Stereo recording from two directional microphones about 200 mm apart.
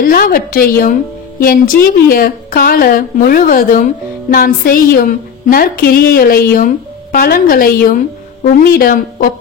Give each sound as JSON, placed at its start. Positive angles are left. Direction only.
{"t": 0.0, "sound": "a woman's voice", "side_deg": 45}